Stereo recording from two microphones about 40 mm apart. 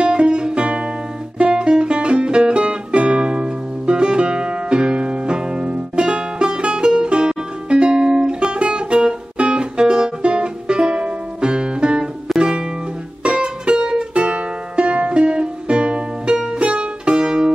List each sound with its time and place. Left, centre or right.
0.0 s guitar: right
1.4 s music: right